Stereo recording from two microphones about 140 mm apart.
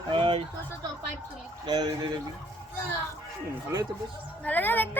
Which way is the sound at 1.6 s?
30° right (ahead or behind).